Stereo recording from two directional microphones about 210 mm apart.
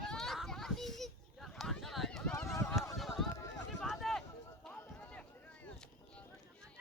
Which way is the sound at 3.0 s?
Centre (ahead or behind).